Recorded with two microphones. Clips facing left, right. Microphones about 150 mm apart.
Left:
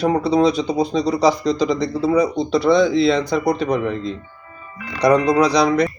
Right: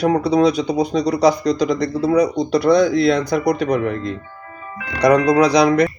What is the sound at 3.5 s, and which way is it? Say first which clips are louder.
Speech: right 2 dB; 5° left (ahead or behind).